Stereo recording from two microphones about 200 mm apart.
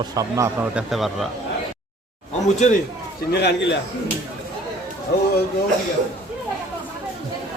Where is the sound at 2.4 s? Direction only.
35° left (ahead or behind).